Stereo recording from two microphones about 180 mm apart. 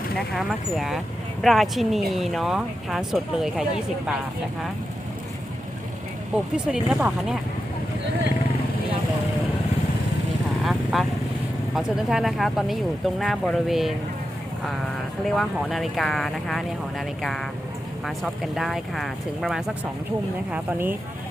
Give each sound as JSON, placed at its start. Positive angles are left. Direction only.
{"t": 0.2, "sound": "speech", "side_deg": 0}
{"t": 6.3, "sound": "speech", "side_deg": -5}
{"t": 10.6, "sound": "vehicle", "side_deg": 0}
{"t": 11.7, "sound": "speech", "side_deg": -5}
{"t": 15.3, "sound": "speech", "side_deg": 0}
{"t": 18.0, "sound": "speech", "side_deg": 0}